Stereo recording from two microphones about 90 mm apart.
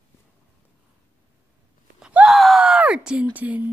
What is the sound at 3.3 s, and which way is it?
Speech, 20° right (ahead or behind).